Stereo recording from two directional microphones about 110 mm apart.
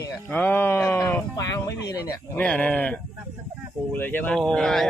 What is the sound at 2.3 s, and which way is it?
Speech, 10° left (ahead or behind).